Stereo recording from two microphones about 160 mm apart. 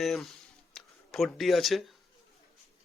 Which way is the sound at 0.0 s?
Centre (ahead or behind).